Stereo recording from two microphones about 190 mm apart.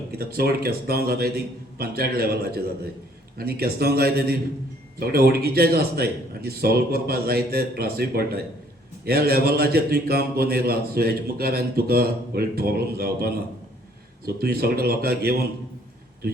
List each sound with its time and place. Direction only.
0.2 s a man's voice: 55° right (ahead or behind)